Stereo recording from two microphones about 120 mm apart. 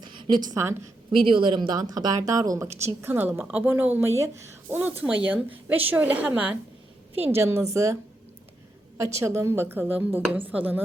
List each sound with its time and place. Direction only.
0.0 s a sound: 40° right (ahead or behind)
1.1 s speech: 45° right (ahead or behind); by 6.6 s 5° right (ahead or behind)
7.2 s speech: 20° right (ahead or behind)
9.0 s speech: 25° right (ahead or behind)